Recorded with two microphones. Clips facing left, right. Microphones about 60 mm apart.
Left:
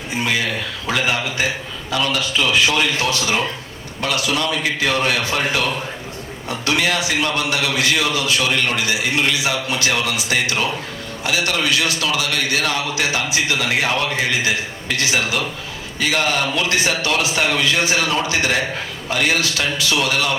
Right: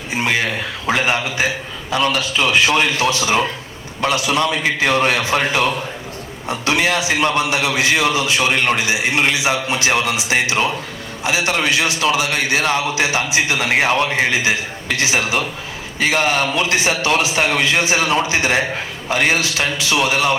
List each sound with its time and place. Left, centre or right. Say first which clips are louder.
0.1 s a man's voice: right 2 dB; right